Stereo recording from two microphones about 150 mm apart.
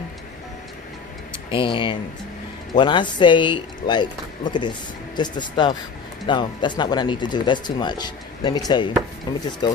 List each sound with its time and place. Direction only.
1.5 s speech: 35° left (ahead or behind)